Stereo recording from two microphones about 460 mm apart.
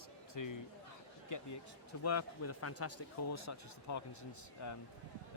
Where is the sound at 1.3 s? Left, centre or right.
Left.